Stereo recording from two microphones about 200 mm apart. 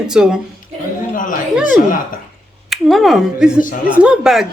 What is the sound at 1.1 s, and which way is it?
Chatter, 40° left (ahead or behind).